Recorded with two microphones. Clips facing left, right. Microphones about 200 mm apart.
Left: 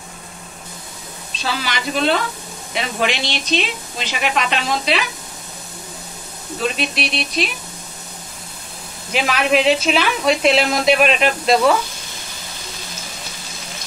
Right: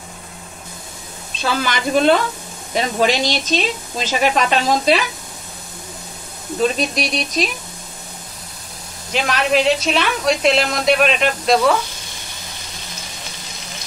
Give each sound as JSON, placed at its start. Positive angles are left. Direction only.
{"t": 1.4, "sound": "speech", "side_deg": -50}
{"t": 6.6, "sound": "speech", "side_deg": -40}
{"t": 9.1, "sound": "speech", "side_deg": 5}